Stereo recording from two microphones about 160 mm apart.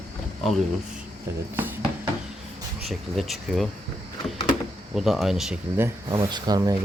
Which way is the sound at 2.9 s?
Centre (ahead or behind).